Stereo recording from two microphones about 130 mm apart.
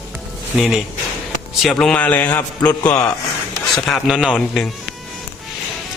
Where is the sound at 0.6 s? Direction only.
Centre (ahead or behind); by 2.7 s 15° left (ahead or behind).